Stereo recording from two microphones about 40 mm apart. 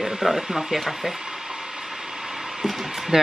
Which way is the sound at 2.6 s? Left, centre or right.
Centre.